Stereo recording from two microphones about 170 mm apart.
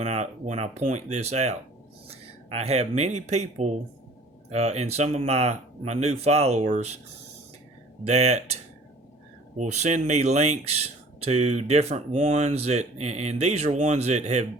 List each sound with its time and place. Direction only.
0.0 s speech: 40° right (ahead or behind)
8.0 s speech: 40° right (ahead or behind)
9.6 s speech: 40° right (ahead or behind)